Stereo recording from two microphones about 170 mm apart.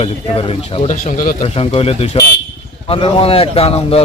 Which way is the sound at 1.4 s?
35° left (ahead or behind).